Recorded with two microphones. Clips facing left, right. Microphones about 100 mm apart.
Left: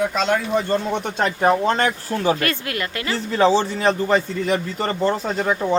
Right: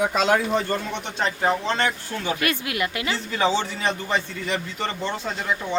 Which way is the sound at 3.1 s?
35° left (ahead or behind).